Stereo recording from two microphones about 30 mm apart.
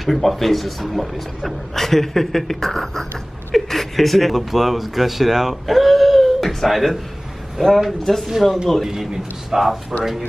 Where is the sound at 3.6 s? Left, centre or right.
Centre.